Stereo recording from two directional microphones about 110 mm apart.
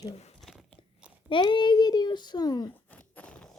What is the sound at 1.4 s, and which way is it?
A child's voice, 45° left (ahead or behind).